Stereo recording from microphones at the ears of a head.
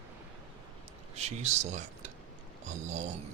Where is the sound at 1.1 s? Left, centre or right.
Right.